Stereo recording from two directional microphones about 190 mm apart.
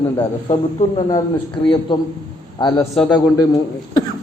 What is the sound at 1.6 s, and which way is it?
A man's voice, 25° left (ahead or behind).